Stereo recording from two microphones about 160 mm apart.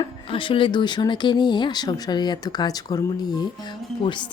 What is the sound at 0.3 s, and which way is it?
Speech, 35° left (ahead or behind).